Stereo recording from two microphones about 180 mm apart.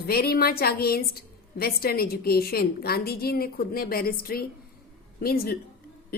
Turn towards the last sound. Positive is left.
turn(degrees=55)  # may be behind; listen again after turning